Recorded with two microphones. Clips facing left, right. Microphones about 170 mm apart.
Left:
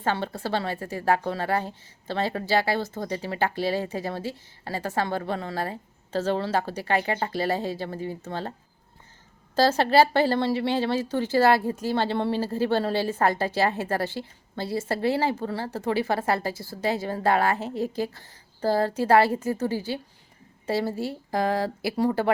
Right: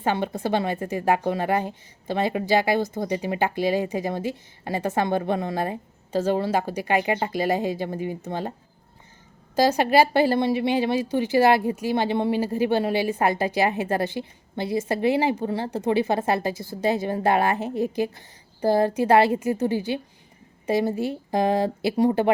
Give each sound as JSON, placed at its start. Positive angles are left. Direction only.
{"t": 0.0, "sound": "speech", "side_deg": -15}
{"t": 9.6, "sound": "speech", "side_deg": -15}